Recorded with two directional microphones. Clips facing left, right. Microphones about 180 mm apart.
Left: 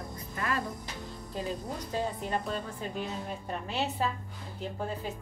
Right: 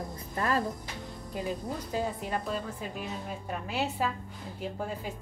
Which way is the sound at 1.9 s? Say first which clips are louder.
Left 1 dB; 5° right (ahead or behind).